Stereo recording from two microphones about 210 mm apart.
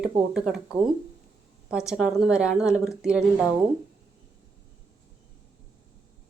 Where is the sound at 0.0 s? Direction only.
5° right (ahead or behind).